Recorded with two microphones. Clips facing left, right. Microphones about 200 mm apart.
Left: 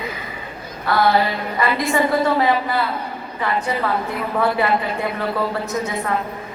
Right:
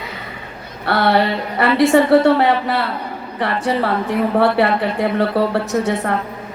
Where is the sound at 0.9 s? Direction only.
70° right (ahead or behind).